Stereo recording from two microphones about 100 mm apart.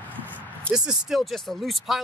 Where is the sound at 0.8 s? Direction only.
5° right (ahead or behind).